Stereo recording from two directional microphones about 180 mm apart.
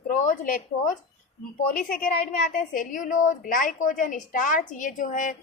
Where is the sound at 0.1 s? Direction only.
45° left (ahead or behind).